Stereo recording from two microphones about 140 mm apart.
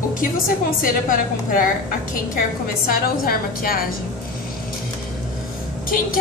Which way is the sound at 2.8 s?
90° left.